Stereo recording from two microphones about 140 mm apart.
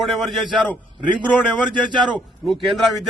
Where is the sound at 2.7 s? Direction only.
Centre (ahead or behind).